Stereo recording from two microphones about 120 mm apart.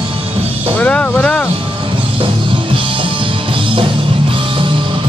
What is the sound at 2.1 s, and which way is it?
Music, 45° right (ahead or behind).